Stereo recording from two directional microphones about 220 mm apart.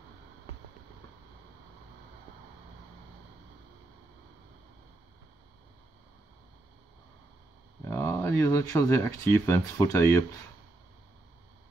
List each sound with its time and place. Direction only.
7.8 s speech: 10° left (ahead or behind)